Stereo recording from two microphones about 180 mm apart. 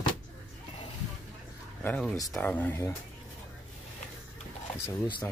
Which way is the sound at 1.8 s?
5° left (ahead or behind).